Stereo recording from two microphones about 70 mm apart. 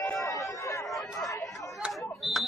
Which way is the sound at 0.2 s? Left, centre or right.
Left.